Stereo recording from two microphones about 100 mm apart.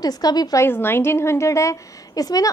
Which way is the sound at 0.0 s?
40° left (ahead or behind).